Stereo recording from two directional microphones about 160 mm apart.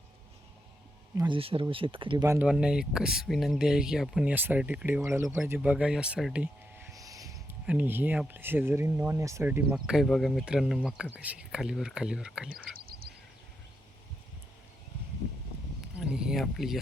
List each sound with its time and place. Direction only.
1.1 s speech: 25° right (ahead or behind)
1.4 s speech: 35° right (ahead or behind)
2.2 s speech: 15° right (ahead or behind)
2.5 s speech: 5° right (ahead or behind)
6.9 s a sound: 20° right (ahead or behind)
7.7 s speech: 10° right (ahead or behind)
9.6 s speech: 5° right (ahead or behind)
12.5 s a sound: 65° right (ahead or behind)
16.0 s speech: 5° right (ahead or behind)